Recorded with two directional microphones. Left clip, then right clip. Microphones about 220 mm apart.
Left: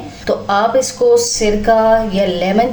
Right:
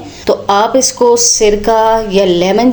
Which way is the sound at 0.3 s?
35° right (ahead or behind).